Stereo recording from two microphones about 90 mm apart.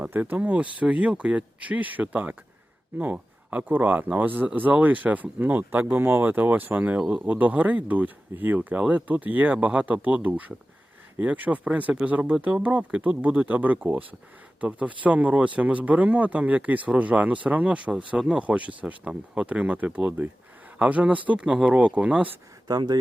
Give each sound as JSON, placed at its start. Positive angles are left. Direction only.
{"t": 0.0, "sound": "speech", "side_deg": -20}
{"t": 22.6, "sound": "speech", "side_deg": -50}